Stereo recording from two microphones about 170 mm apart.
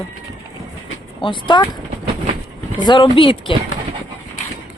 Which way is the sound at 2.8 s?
25° left (ahead or behind).